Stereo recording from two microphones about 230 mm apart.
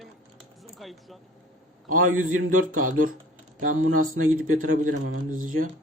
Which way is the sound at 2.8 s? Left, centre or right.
Right.